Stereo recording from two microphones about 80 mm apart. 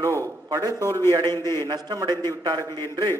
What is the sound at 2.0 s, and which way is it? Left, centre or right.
Speech, right.